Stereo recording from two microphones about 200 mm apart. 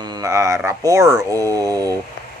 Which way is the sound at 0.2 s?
15° right (ahead or behind).